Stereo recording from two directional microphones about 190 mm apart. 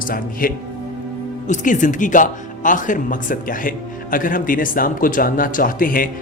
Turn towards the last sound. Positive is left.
turn(degrees=45)  # may be behind; listen again after turning